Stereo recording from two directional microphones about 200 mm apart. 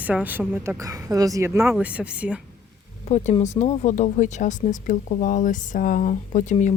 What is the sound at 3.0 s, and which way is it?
Speech, 35° left (ahead or behind).